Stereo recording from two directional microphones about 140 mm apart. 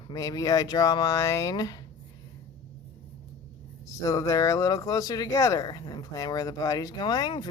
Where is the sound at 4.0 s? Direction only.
25° left (ahead or behind).